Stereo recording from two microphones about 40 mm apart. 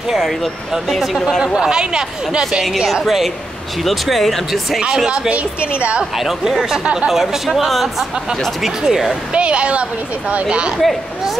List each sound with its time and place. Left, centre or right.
0.1 s speech: centre
1.4 s speech: centre
2.8 s speech: centre
5.3 s a woman's voice: right
6.1 s speech: centre
6.8 s speech: right
7.1 s speech: centre
9.3 s speech: right
10.8 s speech: centre